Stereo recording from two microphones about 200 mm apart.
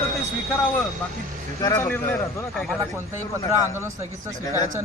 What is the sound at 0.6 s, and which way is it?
A man's voice, 10° left (ahead or behind).